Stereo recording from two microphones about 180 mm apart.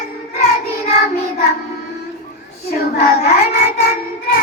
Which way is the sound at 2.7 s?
60° left (ahead or behind).